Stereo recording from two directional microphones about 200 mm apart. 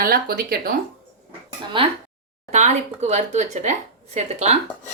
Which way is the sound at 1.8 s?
25° right (ahead or behind).